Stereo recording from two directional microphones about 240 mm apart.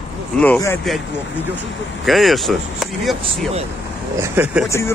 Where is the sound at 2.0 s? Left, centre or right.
Centre.